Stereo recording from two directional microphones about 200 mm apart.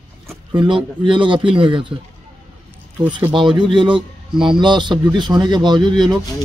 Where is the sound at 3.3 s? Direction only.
25° right (ahead or behind).